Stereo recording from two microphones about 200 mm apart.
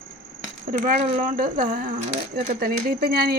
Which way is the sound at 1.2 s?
45° right (ahead or behind).